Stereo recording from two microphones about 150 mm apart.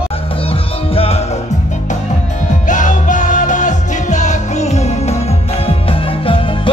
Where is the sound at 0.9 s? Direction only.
40° left (ahead or behind).